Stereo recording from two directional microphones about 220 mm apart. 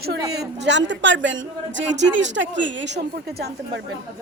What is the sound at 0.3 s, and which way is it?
A man's voice, 50° right (ahead or behind).